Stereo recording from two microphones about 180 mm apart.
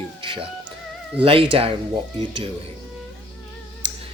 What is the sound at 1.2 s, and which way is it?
Speech, 30° right (ahead or behind).